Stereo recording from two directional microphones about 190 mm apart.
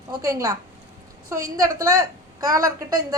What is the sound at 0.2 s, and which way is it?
Speech, 15° right (ahead or behind).